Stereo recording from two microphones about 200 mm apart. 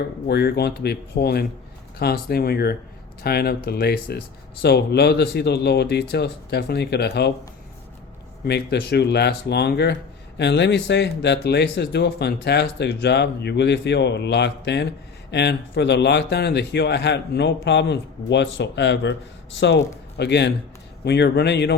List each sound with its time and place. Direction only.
0.3 s speech: 55° left (ahead or behind)
8.4 s speech: 55° left (ahead or behind)